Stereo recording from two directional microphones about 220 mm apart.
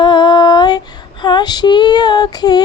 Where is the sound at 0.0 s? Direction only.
20° left (ahead or behind).